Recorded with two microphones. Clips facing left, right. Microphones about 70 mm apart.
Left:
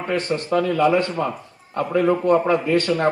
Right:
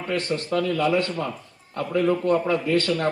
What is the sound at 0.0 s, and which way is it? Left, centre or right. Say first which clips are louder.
A man's voice: left 3 dB; left.